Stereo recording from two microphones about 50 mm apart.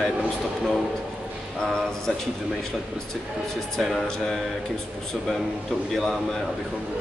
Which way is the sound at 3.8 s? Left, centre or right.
Centre.